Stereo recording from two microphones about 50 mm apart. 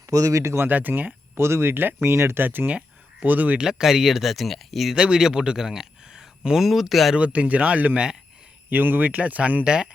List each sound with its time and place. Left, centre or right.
0.1 s speech: right
0.6 s speech: right
1.4 s speech: right
2.0 s speech: right
3.6 s speech: centre
4.9 s speech: centre
6.7 s speech: centre
7.2 s speech: right
9.6 s speech: centre